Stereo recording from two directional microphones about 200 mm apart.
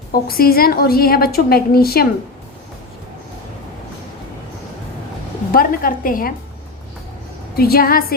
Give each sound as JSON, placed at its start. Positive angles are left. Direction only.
{"t": 0.1, "sound": "a woman's voice", "side_deg": 50}
{"t": 5.5, "sound": "a woman's voice", "side_deg": 45}
{"t": 7.5, "sound": "a woman's voice", "side_deg": 50}